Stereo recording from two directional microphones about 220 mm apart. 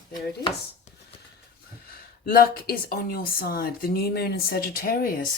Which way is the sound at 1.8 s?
40° left (ahead or behind).